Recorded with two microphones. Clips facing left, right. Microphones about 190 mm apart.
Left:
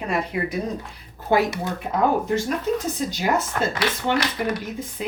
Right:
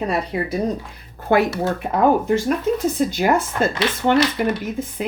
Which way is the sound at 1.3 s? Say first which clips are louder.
Right 3 dB; 60° right (ahead or behind).